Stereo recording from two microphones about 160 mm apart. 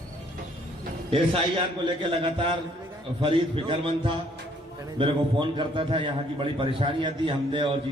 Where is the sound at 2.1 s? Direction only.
35° right (ahead or behind).